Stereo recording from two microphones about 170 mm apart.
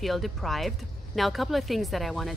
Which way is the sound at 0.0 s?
Centre (ahead or behind).